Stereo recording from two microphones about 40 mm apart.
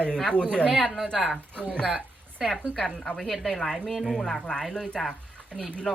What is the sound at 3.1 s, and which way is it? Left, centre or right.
Speech, centre.